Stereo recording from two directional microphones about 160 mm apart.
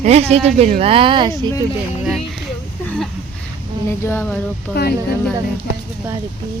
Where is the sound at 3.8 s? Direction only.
15° left (ahead or behind).